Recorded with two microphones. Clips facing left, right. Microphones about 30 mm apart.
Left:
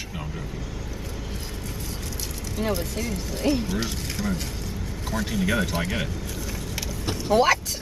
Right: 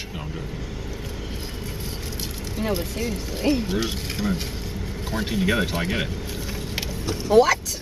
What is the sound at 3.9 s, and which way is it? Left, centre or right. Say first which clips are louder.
Speech: right 2 dB; right.